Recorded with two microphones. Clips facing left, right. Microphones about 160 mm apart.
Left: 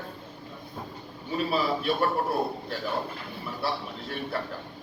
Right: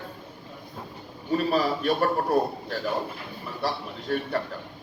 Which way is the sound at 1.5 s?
40° right (ahead or behind).